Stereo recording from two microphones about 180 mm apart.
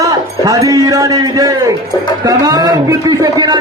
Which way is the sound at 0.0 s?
20° right (ahead or behind).